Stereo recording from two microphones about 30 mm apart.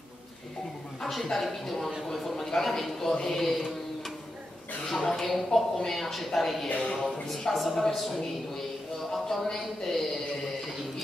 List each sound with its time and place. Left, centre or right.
1.1 s a man's voice: centre
4.8 s a man's voice: centre
6.8 s speech: left
7.2 s a man's voice: centre